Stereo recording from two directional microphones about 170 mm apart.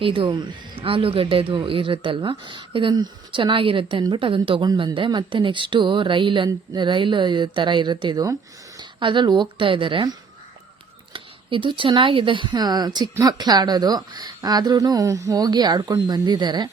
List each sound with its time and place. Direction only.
0.0 s speech: 30° right (ahead or behind)